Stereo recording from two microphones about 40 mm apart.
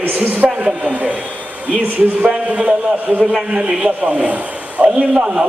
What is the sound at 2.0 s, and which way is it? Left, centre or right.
Speech, right.